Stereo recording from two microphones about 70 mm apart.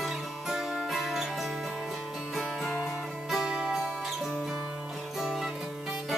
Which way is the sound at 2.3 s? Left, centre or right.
Centre.